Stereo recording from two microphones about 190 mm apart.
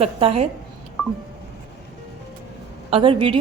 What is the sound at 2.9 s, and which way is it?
Speech, 30° right (ahead or behind).